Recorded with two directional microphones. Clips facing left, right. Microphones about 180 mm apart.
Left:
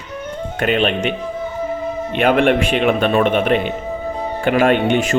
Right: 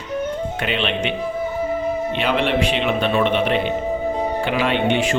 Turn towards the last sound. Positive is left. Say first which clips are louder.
# left 4 dB
turn(degrees=45)  # may be behind; listen again after turning